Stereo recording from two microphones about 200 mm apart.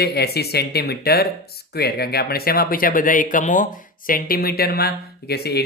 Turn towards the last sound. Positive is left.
turn(degrees=55)  # may be behind; listen again after turning